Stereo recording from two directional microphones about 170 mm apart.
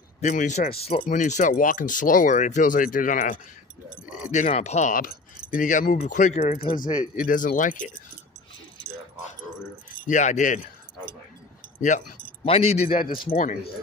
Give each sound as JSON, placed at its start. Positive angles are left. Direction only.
{"t": 0.2, "sound": "speech", "side_deg": 50}
{"t": 1.0, "sound": "speech", "side_deg": 45}
{"t": 7.2, "sound": "speech", "side_deg": 50}
{"t": 10.0, "sound": "speech", "side_deg": 45}
{"t": 12.4, "sound": "speech", "side_deg": 35}
{"t": 13.3, "sound": "speech", "side_deg": 50}